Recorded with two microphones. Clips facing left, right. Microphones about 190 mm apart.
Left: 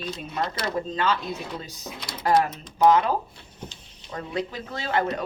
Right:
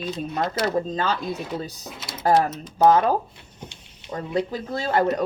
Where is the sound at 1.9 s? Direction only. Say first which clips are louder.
Even; 5° right (ahead or behind).